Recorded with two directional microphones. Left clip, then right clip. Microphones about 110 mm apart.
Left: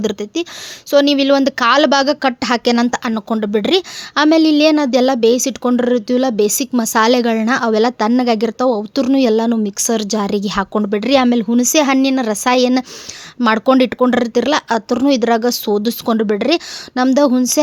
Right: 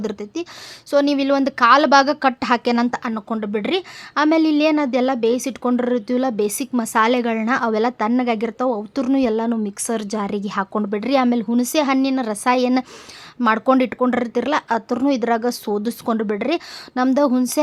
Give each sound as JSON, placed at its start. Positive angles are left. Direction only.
{"t": 0.0, "sound": "a woman's voice", "side_deg": 50}
{"t": 2.9, "sound": "a woman's voice", "side_deg": 55}